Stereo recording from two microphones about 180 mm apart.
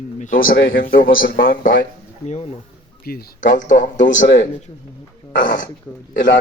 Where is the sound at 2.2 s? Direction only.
35° left (ahead or behind).